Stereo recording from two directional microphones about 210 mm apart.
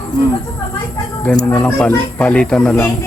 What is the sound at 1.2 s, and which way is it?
Speech, 10° left (ahead or behind).